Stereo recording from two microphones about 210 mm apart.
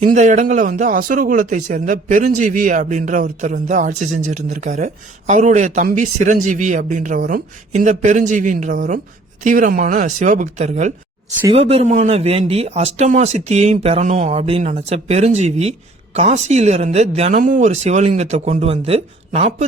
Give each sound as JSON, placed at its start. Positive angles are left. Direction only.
{"t": 0.0, "sound": "a man's voice", "side_deg": -35}